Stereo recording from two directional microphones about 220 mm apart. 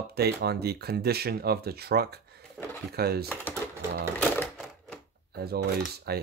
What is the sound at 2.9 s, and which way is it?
Speech, 45° right (ahead or behind).